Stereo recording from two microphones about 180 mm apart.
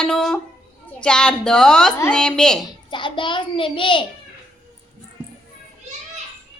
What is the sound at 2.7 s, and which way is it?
A child's voice, 25° left (ahead or behind).